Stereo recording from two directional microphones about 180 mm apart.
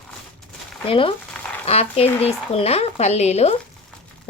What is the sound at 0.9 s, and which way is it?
Speech, 30° left (ahead or behind).